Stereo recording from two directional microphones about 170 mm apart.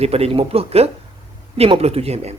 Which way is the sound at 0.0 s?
35° right (ahead or behind).